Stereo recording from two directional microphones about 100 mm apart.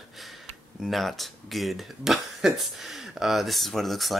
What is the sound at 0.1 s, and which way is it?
Speech, centre (ahead or behind).